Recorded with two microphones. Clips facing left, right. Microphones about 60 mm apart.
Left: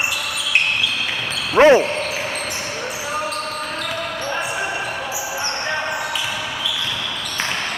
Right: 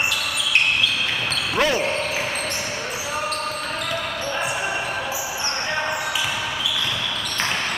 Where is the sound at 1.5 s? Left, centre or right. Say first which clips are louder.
Left 11 dB; left.